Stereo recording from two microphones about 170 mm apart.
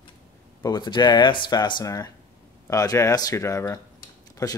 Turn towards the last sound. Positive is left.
turn(degrees=20)  # may be behind; listen again after turning